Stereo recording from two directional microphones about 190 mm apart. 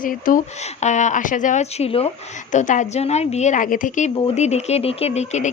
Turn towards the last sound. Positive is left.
turn(degrees=35)  # may be behind; listen again after turning